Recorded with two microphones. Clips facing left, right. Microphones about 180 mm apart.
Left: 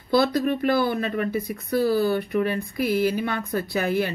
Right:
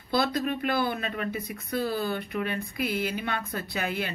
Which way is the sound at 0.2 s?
55° left (ahead or behind).